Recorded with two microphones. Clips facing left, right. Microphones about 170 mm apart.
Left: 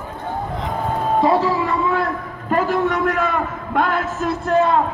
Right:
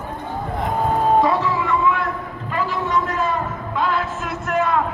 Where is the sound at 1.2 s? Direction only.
30° left (ahead or behind).